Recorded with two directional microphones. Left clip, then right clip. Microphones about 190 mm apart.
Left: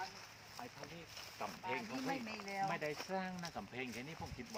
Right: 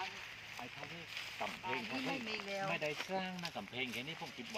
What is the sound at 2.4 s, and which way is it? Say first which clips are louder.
Speech: left 4 dB; 30° left (ahead or behind).